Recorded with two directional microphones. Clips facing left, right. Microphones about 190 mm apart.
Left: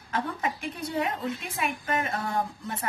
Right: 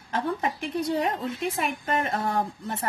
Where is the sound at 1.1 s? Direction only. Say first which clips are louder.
Right 4 dB; 45° right (ahead or behind).